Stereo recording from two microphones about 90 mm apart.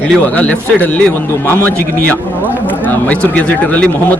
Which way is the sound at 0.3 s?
15° left (ahead or behind).